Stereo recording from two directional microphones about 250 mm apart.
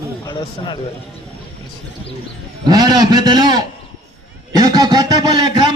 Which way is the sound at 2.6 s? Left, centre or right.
Centre.